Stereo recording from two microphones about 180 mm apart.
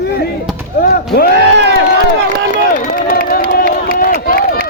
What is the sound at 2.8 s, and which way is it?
Run, 50° left (ahead or behind).